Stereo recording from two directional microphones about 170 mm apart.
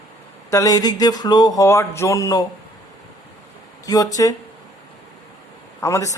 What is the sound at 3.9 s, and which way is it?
Speech, 20° left (ahead or behind).